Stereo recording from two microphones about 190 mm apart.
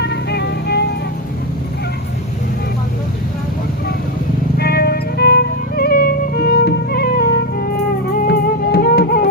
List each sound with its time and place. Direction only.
0.0 s music: 60° left (ahead or behind)
4.5 s music: 55° left (ahead or behind)